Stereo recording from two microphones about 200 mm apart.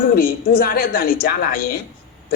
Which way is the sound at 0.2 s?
45° left (ahead or behind).